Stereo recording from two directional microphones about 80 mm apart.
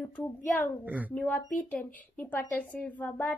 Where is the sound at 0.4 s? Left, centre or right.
Centre.